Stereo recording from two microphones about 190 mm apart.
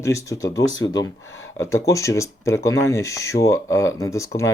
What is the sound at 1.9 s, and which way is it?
Speech, 15° left (ahead or behind).